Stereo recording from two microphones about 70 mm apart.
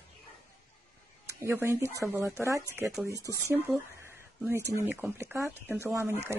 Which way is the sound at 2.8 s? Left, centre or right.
Centre.